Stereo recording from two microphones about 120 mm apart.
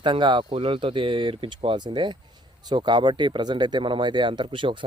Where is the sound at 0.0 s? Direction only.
40° right (ahead or behind).